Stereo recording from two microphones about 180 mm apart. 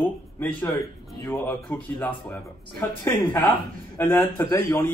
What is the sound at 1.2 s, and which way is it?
Speech, 10° left (ahead or behind).